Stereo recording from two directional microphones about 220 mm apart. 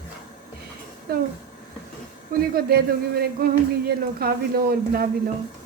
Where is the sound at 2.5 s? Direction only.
45° right (ahead or behind).